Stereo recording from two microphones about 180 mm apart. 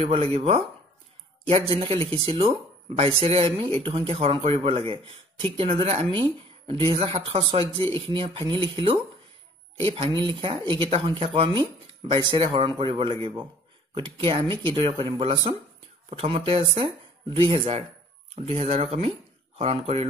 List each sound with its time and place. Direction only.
0.0 s speech: 35° right (ahead or behind)
1.7 s speech: 30° right (ahead or behind)